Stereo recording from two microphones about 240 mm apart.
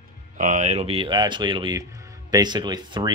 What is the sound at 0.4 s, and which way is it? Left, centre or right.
Speech, right.